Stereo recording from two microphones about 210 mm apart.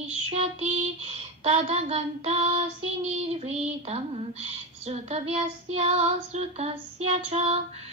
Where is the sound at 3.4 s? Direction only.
30° right (ahead or behind).